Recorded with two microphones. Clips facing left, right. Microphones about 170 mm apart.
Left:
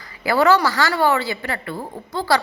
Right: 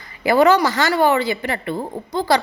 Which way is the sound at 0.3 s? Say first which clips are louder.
Right 2 dB; 20° right (ahead or behind).